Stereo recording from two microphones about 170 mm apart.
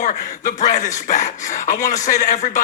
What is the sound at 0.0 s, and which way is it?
Speech, 45° left (ahead or behind).